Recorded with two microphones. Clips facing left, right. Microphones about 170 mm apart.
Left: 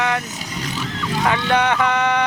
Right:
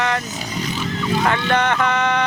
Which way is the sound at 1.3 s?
10° left (ahead or behind).